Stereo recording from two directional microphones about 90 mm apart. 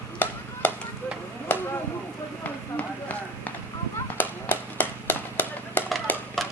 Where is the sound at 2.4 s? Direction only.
15° left (ahead or behind).